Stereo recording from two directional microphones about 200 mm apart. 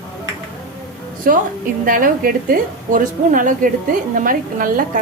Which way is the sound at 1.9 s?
45° right (ahead or behind).